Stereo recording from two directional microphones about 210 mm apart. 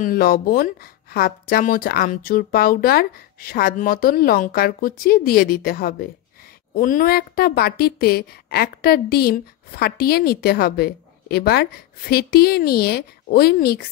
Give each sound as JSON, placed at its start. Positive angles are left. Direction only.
{"t": 0.0, "sound": "a woman's voice", "side_deg": 45}